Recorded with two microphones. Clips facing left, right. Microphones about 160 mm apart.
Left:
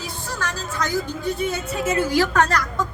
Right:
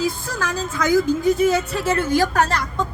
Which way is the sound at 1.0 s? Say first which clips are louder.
Right 8 dB; 90° right.